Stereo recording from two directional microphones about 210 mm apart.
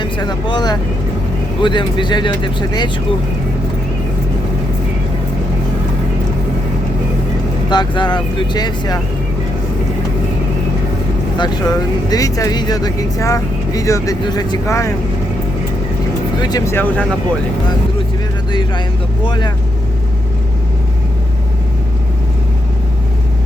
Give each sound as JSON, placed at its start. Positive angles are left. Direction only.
{"t": 0.0, "sound": "speech", "side_deg": 20}
{"t": 7.7, "sound": "speech", "side_deg": 20}
{"t": 11.3, "sound": "speech", "side_deg": 20}
{"t": 16.4, "sound": "speech", "side_deg": 20}
{"t": 19.2, "sound": "speech", "side_deg": 20}